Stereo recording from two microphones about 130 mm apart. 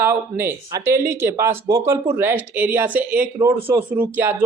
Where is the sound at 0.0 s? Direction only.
15° right (ahead or behind).